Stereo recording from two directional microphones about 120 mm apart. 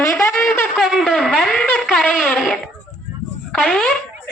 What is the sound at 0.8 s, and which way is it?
A woman's voice, centre (ahead or behind).